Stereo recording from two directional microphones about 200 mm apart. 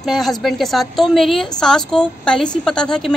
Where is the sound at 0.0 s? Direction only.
Centre (ahead or behind).